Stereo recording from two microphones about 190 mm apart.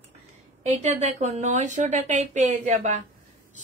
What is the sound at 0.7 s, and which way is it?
Speech, 35° right (ahead or behind).